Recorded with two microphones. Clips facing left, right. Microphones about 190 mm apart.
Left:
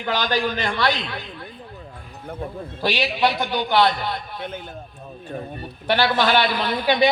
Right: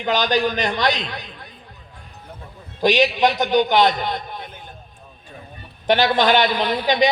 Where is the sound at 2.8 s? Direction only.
20° right (ahead or behind).